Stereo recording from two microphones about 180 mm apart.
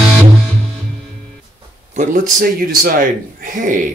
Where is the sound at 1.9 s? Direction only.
45° right (ahead or behind).